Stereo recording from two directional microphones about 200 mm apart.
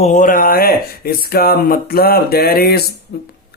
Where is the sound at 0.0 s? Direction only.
35° left (ahead or behind).